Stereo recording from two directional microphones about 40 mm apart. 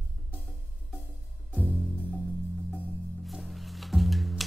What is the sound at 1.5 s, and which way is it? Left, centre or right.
Music, right.